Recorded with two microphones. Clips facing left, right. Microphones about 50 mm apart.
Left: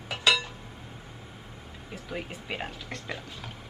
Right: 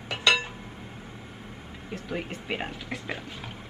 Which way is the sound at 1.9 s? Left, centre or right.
Centre.